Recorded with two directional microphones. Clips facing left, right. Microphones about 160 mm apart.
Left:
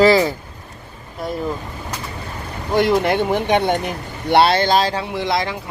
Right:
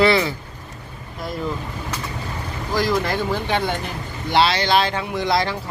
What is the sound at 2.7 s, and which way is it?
Speech, 25° left (ahead or behind).